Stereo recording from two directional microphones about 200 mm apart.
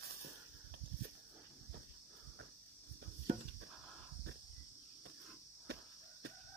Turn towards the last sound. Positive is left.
turn(degrees=-60)  # may be behind; listen again after turning